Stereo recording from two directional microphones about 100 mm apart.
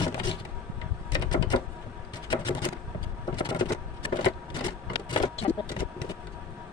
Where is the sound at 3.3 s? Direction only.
50° left (ahead or behind).